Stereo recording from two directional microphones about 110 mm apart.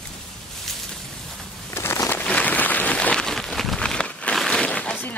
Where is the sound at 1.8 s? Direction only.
25° left (ahead or behind).